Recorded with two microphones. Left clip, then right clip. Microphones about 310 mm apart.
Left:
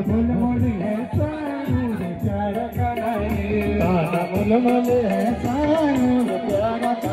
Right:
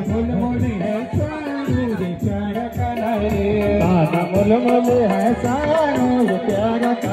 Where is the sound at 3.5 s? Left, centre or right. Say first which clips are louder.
Right 1 dB; right.